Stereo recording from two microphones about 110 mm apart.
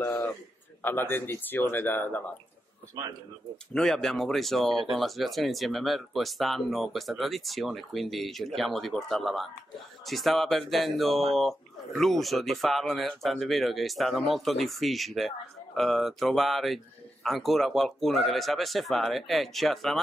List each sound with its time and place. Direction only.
0.0 s a sound: 15° left (ahead or behind)
0.8 s speech: 20° left (ahead or behind)
3.7 s speech: 5° left (ahead or behind)